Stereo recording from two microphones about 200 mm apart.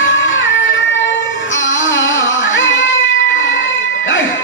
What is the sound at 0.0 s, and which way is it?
Music, 70° left (ahead or behind).